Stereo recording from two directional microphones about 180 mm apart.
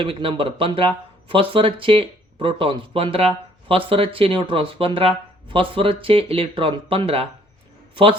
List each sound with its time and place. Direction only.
0.0 s speech: 30° right (ahead or behind)